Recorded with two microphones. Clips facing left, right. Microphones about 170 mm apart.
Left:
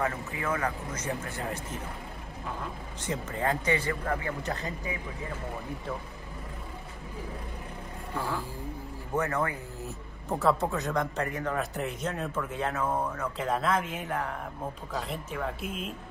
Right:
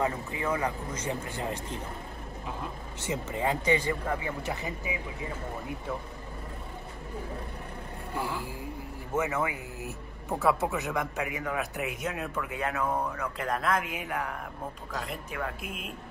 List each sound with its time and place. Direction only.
0.0 s speech: 20° right (ahead or behind)
3.1 s speech: 10° right (ahead or behind)
9.1 s a man's voice: 5° right (ahead or behind)